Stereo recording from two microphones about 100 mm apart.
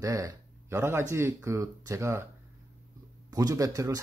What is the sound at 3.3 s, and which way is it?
Speech, 35° right (ahead or behind).